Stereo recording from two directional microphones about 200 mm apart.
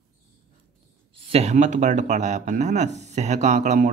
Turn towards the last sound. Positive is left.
turn(degrees=-35)  # may be behind; listen again after turning